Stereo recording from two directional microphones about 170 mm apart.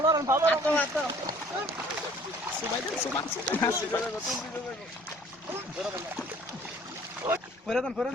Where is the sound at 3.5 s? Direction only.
10° left (ahead or behind).